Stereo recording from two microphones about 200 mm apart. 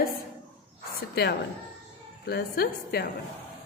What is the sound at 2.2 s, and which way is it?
Speech, 55° left (ahead or behind).